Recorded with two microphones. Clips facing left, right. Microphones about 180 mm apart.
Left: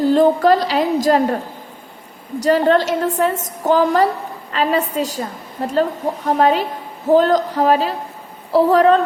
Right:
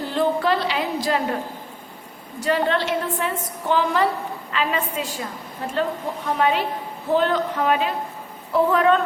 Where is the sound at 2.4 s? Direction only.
40° left (ahead or behind).